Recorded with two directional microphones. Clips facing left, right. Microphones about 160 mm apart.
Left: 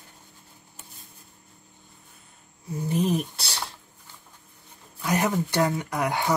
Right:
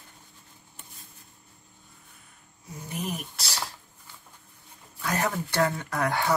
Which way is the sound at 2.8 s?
30° left (ahead or behind).